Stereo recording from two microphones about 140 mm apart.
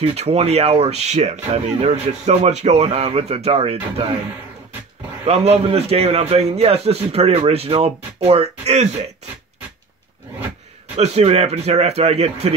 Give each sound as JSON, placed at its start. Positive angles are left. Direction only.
{"t": 0.0, "sound": "speech", "side_deg": -50}
{"t": 5.2, "sound": "speech", "side_deg": -50}
{"t": 11.0, "sound": "speech", "side_deg": -50}